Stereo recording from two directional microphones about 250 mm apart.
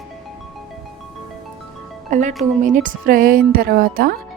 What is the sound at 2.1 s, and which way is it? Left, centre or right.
Speech, right.